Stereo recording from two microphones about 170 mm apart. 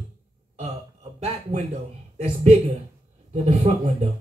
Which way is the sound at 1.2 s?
35° right (ahead or behind).